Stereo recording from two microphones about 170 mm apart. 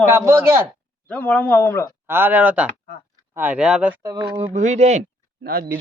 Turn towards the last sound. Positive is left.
turn(degrees=-65)  # may be behind; listen again after turning